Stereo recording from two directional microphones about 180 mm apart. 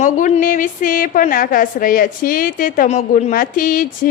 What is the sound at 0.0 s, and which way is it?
A woman's voice, 45° left (ahead or behind).